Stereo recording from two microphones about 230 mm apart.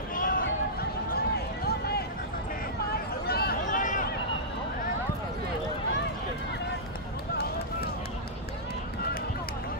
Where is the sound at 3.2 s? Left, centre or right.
Left.